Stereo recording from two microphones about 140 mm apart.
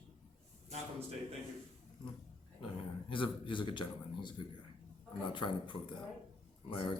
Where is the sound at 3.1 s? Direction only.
35° left (ahead or behind).